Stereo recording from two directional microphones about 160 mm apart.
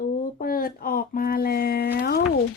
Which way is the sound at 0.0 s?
60° left (ahead or behind).